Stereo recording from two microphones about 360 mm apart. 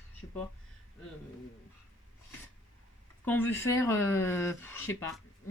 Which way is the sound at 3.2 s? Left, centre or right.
Centre.